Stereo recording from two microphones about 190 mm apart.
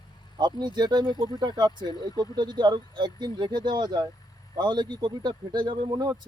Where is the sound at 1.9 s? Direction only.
20° left (ahead or behind).